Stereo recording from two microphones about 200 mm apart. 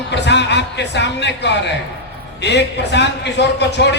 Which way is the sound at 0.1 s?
60° left (ahead or behind).